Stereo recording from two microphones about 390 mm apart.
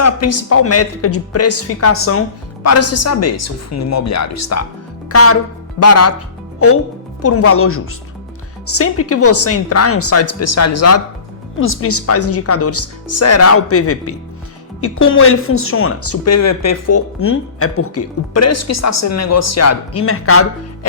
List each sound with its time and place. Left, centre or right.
0.0 s speech: left
5.0 s music: left
5.8 s speech: left